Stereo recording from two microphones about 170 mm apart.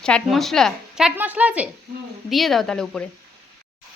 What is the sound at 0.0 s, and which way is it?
Speech, 5° left (ahead or behind).